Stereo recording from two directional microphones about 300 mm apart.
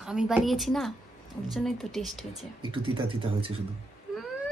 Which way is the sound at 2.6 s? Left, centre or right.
Centre.